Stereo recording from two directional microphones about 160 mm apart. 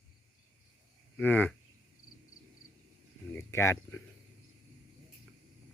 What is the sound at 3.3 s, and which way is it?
Speech, 15° left (ahead or behind).